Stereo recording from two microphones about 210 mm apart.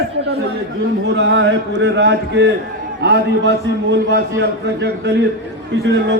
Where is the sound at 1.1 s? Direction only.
55° right (ahead or behind).